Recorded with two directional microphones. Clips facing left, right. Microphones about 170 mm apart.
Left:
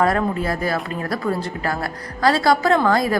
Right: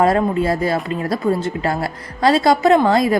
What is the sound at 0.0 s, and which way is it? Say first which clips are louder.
A woman's voice: right 4 dB; 25° right (ahead or behind).